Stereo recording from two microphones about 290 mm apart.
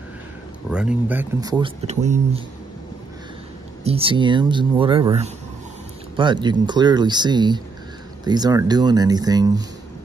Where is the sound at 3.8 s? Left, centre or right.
Centre.